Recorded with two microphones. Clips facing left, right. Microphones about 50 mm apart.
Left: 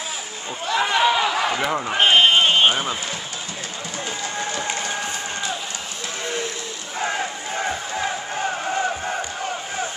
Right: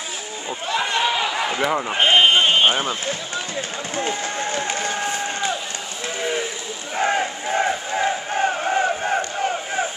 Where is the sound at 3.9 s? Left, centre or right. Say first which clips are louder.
Right 4 dB; right.